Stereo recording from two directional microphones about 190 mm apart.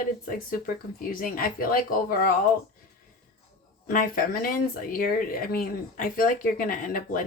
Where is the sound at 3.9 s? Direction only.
45° left (ahead or behind).